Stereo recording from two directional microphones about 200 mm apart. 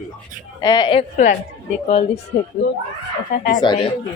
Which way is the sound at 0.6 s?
20° left (ahead or behind).